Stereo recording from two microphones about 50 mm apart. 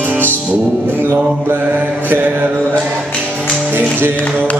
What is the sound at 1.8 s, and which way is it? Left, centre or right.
Mantra, right.